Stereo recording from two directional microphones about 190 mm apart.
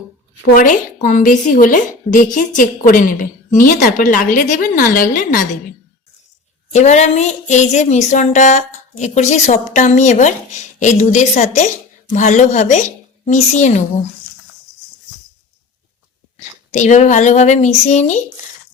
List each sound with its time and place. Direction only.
0.5 s a woman's voice: 45° left (ahead or behind)
6.7 s speech: 35° left (ahead or behind)
16.7 s speech: 40° left (ahead or behind)